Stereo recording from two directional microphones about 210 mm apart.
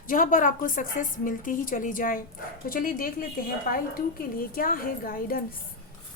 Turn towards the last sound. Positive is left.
turn(degrees=45)  # may be behind; listen again after turning